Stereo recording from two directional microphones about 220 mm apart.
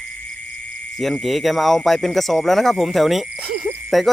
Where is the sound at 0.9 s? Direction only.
Centre (ahead or behind).